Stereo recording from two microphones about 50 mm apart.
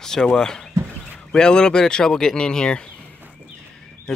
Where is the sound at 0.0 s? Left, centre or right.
Centre.